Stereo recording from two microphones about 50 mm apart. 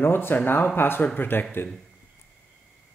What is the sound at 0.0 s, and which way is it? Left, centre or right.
Speech, left.